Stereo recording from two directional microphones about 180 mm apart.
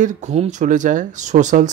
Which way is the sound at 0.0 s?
40° right (ahead or behind).